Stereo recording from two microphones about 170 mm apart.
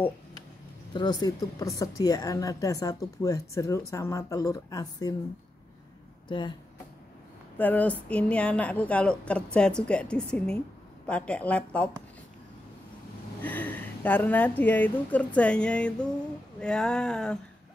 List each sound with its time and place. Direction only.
0.9 s a woman's voice: 25° left (ahead or behind)
6.2 s speech: 25° left (ahead or behind)
7.5 s a woman's voice: 10° left (ahead or behind)
13.4 s a woman's voice: 10° left (ahead or behind)